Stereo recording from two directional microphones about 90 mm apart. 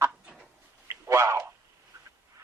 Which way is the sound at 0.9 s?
30° right (ahead or behind).